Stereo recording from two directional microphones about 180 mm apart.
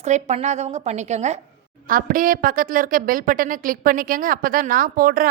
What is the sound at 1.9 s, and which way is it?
A woman's voice, 50° right (ahead or behind).